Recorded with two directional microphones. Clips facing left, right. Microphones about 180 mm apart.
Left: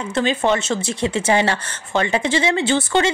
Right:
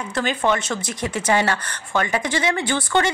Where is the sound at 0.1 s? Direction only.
25° left (ahead or behind).